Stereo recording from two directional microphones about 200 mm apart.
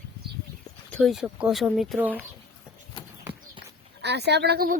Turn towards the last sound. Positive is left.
turn(degrees=-50)  # may be behind; listen again after turning